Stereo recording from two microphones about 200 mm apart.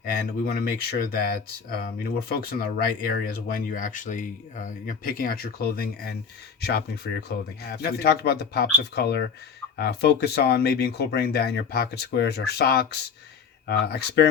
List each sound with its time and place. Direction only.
0.0 s speech: 50° left (ahead or behind)